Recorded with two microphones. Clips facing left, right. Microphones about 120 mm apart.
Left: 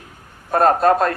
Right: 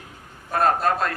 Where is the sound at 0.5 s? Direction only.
40° left (ahead or behind).